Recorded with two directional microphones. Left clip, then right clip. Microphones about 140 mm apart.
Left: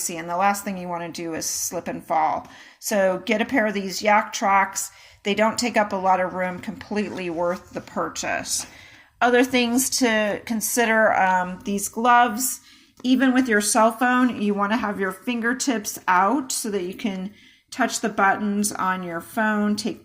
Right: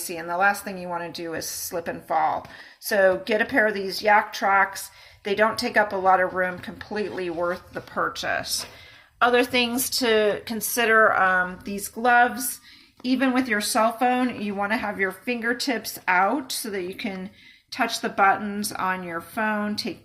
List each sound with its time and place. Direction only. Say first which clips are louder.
0.1 s a woman's voice: even; 25° left (ahead or behind)